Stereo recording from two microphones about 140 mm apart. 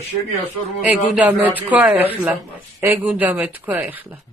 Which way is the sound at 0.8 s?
10° right (ahead or behind).